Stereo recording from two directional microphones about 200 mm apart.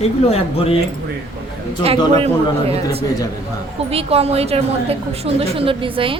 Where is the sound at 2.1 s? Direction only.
30° right (ahead or behind).